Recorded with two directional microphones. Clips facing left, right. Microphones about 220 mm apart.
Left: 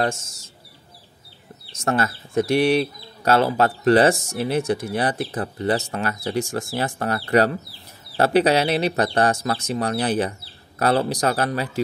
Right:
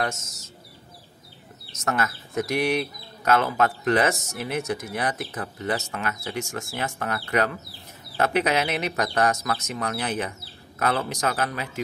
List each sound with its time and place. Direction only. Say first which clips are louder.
0.0 s speech: left 5 dB; 30° left (ahead or behind)
1.7 s speech: left 4 dB; 30° left (ahead or behind)